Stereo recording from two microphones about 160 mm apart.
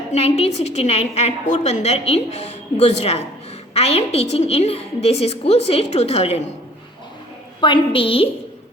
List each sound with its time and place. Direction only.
0.1 s a woman's voice: 40° left (ahead or behind)
7.6 s a woman's voice: 35° left (ahead or behind)